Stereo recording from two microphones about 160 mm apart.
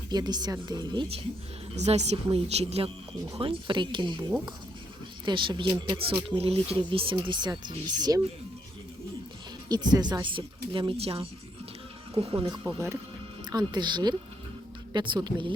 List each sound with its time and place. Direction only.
0.1 s a woman's voice: 25° right (ahead or behind)
1.7 s a woman's voice: 45° right (ahead or behind); by 8.2 s 25° right (ahead or behind)
9.6 s a woman's voice: 25° right (ahead or behind)
12.6 s a woman's voice: 15° right (ahead or behind)